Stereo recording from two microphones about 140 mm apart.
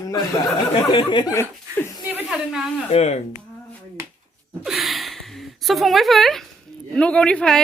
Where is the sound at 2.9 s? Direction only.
50° left (ahead or behind).